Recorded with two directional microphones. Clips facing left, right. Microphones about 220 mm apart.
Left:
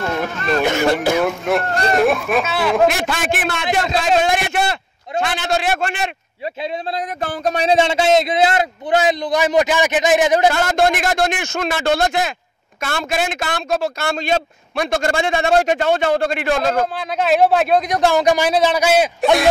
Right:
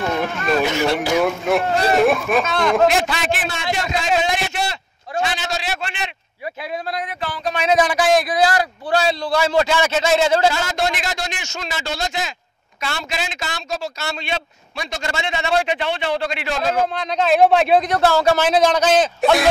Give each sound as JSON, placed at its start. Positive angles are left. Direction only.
{"t": 0.0, "sound": "speech", "side_deg": 0}
{"t": 2.9, "sound": "a man's voice", "side_deg": 50}
{"t": 7.6, "sound": "a man's voice", "side_deg": 25}
{"t": 10.5, "sound": "a man's voice", "side_deg": 55}
{"t": 16.9, "sound": "speech", "side_deg": 5}
{"t": 17.8, "sound": "a man's voice", "side_deg": 15}